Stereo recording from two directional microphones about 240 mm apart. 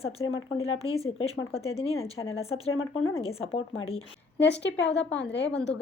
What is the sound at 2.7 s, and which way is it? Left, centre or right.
Speech, left.